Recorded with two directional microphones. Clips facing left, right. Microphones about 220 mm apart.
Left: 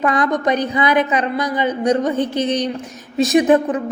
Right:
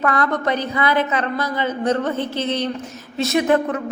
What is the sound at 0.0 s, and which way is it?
A woman's voice, 15° left (ahead or behind).